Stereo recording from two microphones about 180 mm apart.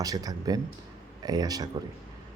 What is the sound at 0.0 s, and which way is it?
Speech, 20° right (ahead or behind).